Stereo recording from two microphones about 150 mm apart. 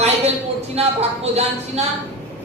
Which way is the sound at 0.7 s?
45° right (ahead or behind).